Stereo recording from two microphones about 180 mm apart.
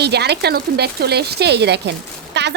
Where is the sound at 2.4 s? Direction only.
70° right (ahead or behind).